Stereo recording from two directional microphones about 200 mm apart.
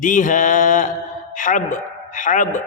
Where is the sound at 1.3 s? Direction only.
40° left (ahead or behind).